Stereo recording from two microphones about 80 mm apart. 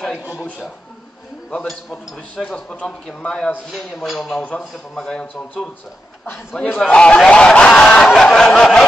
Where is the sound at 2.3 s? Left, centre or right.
Centre.